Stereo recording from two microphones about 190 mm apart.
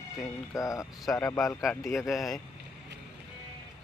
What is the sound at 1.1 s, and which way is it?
Speech, 5° left (ahead or behind).